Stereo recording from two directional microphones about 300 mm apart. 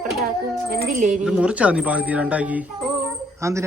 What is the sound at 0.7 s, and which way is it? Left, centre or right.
Speech, right.